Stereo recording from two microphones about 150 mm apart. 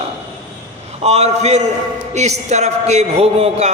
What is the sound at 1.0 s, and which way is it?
A man's voice, 45° right (ahead or behind).